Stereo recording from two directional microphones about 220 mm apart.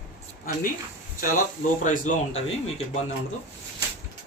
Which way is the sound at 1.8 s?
35° left (ahead or behind).